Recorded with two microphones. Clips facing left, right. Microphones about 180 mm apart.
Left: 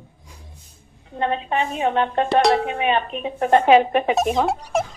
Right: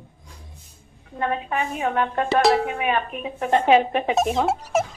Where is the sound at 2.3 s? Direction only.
Centre (ahead or behind).